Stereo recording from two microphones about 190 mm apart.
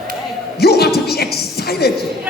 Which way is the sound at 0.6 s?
55° left (ahead or behind).